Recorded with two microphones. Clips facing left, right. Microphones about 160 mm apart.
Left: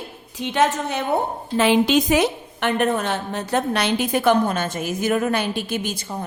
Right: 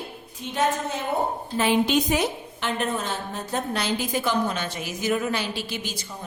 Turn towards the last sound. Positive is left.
turn(degrees=55)  # may be behind; listen again after turning